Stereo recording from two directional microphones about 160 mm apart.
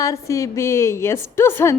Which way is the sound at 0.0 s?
20° left (ahead or behind).